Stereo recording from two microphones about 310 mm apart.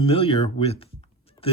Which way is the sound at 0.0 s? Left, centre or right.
Centre.